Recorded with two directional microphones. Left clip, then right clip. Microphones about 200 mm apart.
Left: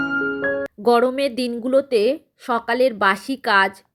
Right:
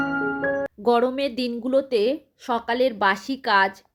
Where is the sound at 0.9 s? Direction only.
25° left (ahead or behind).